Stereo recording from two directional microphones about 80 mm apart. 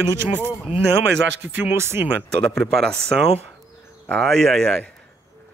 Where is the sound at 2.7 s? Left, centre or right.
Centre.